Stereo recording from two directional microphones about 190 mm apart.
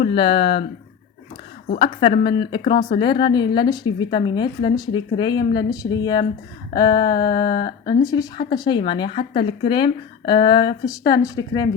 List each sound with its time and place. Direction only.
0.0 s speech: 30° left (ahead or behind)
1.8 s speech: 25° left (ahead or behind)